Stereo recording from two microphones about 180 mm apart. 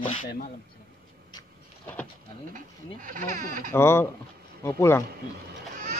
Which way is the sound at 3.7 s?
15° left (ahead or behind).